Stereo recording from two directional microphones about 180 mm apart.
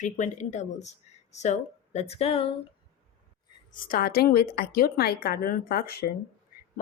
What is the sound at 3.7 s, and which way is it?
A woman's voice, 50° left (ahead or behind).